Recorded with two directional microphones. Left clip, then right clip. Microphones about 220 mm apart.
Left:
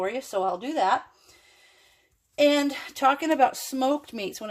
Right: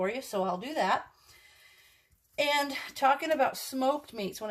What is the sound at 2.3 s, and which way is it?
Speech, 35° left (ahead or behind).